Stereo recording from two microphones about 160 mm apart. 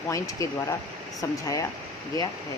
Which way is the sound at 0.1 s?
20° left (ahead or behind).